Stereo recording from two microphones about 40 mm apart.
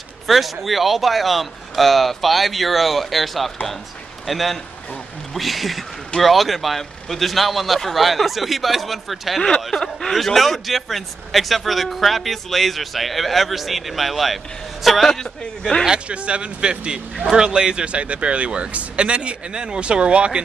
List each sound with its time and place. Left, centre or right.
0.3 s a man's voice: centre
16.1 s a man's voice: right